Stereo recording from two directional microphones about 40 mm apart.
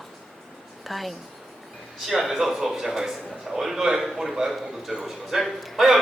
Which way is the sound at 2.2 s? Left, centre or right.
Centre.